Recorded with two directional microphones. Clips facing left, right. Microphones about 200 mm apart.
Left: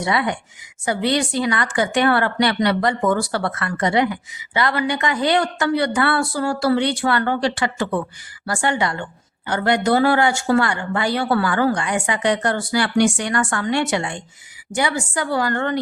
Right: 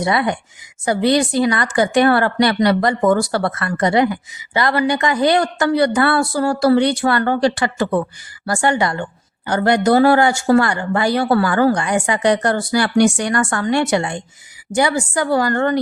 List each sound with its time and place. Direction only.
0.0 s speech: 40° right (ahead or behind)